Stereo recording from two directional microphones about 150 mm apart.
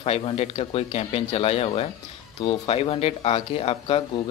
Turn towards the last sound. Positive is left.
turn(degrees=40)  # may be behind; listen again after turning